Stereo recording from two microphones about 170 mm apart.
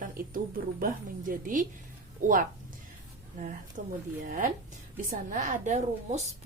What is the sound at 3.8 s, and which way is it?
A woman's voice, 50° right (ahead or behind).